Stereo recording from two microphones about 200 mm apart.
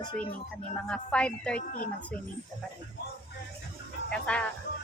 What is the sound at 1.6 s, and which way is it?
Speech, 45° left (ahead or behind).